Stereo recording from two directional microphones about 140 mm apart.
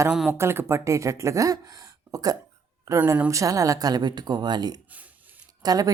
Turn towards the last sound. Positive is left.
turn(degrees=-30)  # may be behind; listen again after turning